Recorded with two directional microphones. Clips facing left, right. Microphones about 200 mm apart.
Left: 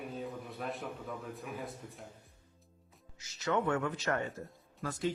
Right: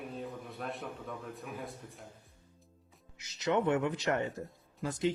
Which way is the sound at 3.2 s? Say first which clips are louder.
Right 2 dB; 20° right (ahead or behind).